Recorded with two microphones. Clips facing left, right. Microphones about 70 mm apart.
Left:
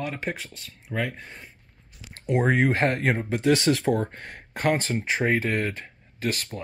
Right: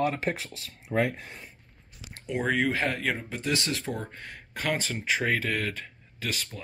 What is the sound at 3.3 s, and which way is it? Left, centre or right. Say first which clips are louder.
Speech: left 9 dB; left.